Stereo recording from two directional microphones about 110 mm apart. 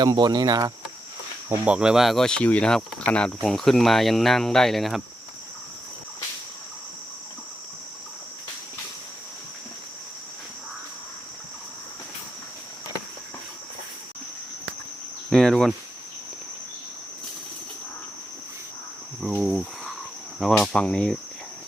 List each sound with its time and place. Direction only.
0.0 s speech: 35° right (ahead or behind)
1.6 s speech: 10° right (ahead or behind)
15.3 s cricket: 5° left (ahead or behind)
19.4 s cricket: centre (ahead or behind)